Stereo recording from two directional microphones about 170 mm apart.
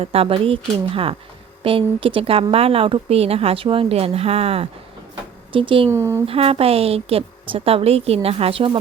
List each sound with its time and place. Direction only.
0.0 s speech: 35° right (ahead or behind)
5.9 s speech: 15° right (ahead or behind)
6.2 s speech: 35° right (ahead or behind)